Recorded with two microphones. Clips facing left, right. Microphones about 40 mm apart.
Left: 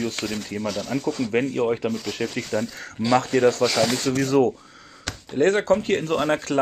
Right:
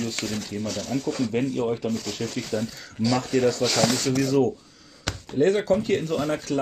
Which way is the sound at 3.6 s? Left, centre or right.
Centre.